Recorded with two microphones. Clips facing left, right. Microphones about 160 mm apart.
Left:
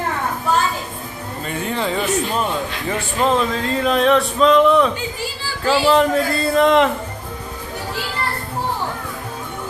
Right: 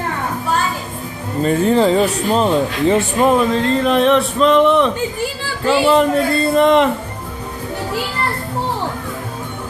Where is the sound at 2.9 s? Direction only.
20° right (ahead or behind).